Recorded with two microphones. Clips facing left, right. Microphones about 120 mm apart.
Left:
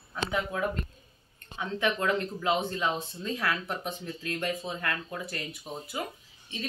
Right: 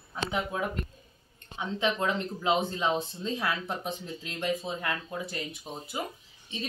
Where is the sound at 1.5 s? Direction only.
20° right (ahead or behind).